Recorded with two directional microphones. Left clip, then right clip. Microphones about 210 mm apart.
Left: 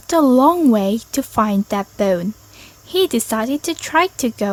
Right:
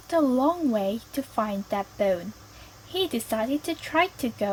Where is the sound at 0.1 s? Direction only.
40° left (ahead or behind).